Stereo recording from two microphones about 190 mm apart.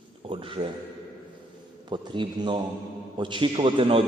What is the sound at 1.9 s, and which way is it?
A man's voice, 25° right (ahead or behind).